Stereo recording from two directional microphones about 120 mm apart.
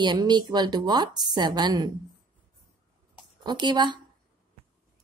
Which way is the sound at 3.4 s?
35° right (ahead or behind).